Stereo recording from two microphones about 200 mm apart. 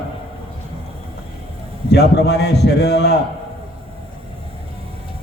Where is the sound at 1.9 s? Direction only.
55° left (ahead or behind).